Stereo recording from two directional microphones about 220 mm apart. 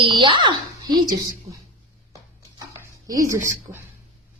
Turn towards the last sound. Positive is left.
turn(degrees=-15)  # may be behind; listen again after turning